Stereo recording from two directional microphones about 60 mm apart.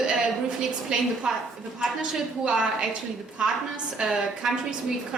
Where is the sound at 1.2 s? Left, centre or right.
Centre.